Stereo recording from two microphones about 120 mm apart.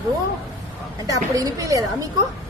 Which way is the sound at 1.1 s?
30° right (ahead or behind).